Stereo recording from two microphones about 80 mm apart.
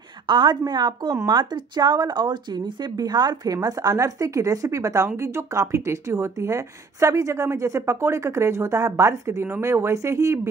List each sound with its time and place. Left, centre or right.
0.3 s speech: right
3.5 s a woman's voice: right